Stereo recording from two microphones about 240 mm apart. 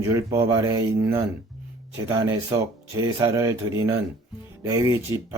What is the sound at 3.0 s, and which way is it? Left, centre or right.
Speech, centre.